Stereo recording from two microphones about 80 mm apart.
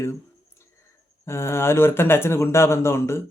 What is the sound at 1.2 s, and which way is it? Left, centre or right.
Speech, left.